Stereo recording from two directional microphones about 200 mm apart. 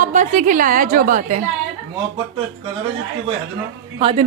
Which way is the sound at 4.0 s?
30° right (ahead or behind).